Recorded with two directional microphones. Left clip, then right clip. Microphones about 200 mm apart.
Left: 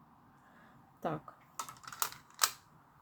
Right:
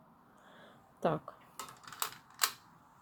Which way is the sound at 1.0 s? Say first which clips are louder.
Right 5 dB; 15° right (ahead or behind).